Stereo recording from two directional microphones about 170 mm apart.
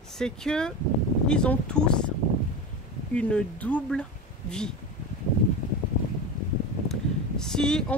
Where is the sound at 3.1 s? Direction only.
5° left (ahead or behind).